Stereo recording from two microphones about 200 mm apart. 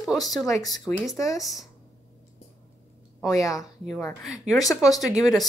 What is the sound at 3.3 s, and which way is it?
A woman's voice, 15° left (ahead or behind).